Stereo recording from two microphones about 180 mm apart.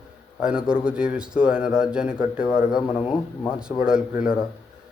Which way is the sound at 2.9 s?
30° left (ahead or behind).